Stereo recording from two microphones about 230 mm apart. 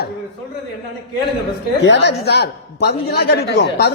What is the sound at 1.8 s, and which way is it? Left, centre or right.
A woman's voice, left.